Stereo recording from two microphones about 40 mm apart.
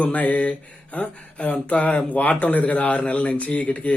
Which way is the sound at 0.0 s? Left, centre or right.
Left.